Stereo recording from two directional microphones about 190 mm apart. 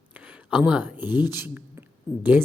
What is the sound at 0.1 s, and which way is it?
Speech, 10° right (ahead or behind).